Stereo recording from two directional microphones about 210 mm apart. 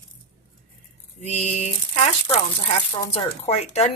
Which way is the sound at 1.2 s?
30° left (ahead or behind).